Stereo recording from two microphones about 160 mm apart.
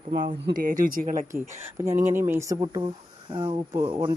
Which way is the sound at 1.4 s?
15° right (ahead or behind).